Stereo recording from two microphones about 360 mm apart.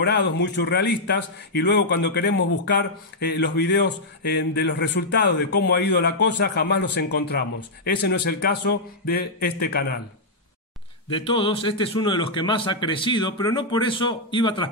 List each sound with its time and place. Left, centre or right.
0.0 s speech: left
11.1 s a man's voice: centre